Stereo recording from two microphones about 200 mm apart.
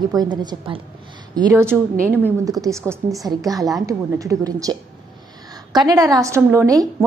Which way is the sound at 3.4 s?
15° right (ahead or behind).